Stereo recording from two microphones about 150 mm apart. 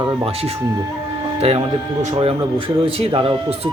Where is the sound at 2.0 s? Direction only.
40° right (ahead or behind).